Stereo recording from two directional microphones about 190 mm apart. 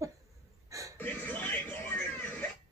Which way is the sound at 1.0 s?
10° left (ahead or behind).